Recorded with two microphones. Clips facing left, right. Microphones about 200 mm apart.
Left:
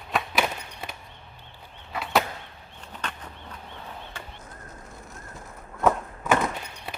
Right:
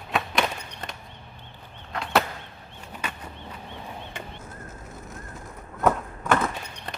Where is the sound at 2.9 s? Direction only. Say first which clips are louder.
Right 1 dB; 10° right (ahead or behind).